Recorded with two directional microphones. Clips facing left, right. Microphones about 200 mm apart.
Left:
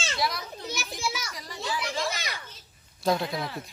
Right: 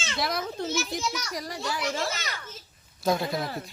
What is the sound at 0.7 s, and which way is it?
Speech, 10° left (ahead or behind).